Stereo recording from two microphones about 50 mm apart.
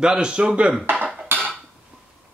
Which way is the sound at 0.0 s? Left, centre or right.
Centre.